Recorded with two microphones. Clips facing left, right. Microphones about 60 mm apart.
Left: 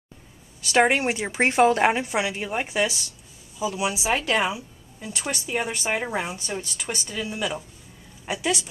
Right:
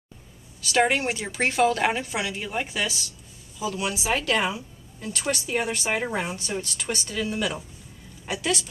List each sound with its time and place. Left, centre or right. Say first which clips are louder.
0.6 s a woman's voice: left 2 dB; left